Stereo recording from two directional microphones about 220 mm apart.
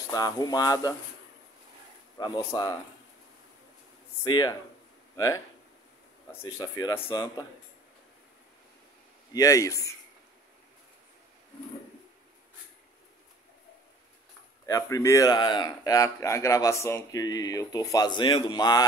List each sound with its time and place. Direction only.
0.1 s a man's voice: 15° left (ahead or behind)
2.1 s speech: 20° left (ahead or behind)
4.2 s speech: 20° left (ahead or behind)
6.4 s speech: 20° left (ahead or behind)
9.3 s a man's voice: 15° left (ahead or behind)
14.7 s a man's voice: 15° left (ahead or behind)